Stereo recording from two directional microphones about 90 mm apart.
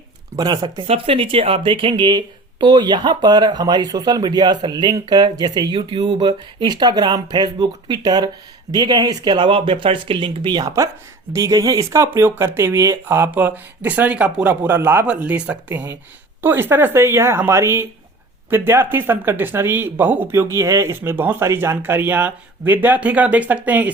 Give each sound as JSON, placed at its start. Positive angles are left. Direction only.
{"t": 0.3, "sound": "speech", "side_deg": -50}
{"t": 0.8, "sound": "speech", "side_deg": -85}
{"t": 9.5, "sound": "speech", "side_deg": -80}
{"t": 11.3, "sound": "speech", "side_deg": -35}